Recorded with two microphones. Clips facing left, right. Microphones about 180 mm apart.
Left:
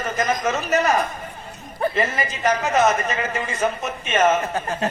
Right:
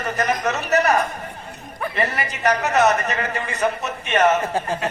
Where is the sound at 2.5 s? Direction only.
70° right (ahead or behind).